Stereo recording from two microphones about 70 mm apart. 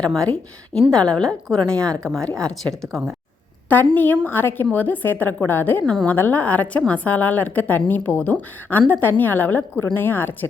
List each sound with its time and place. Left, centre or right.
0.3 s a woman's voice: centre
3.7 s a woman's voice: left
5.8 s a woman's voice: centre
6.1 s a woman's voice: left